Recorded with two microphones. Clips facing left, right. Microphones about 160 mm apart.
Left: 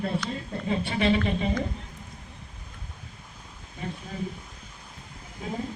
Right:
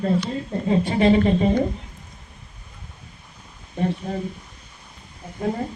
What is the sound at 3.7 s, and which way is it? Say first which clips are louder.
Speech: right 12 dB; 65° right (ahead or behind).